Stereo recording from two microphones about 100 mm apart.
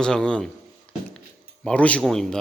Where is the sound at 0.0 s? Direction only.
10° left (ahead or behind).